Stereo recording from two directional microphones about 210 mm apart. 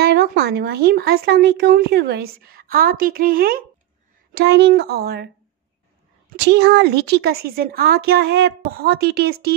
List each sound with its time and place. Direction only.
0.0 s speech: 50° right (ahead or behind)
6.4 s speech: 50° right (ahead or behind)